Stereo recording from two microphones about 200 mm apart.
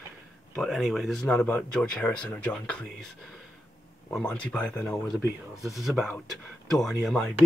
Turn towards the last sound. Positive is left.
turn(degrees=0)  # may be behind; listen again after turning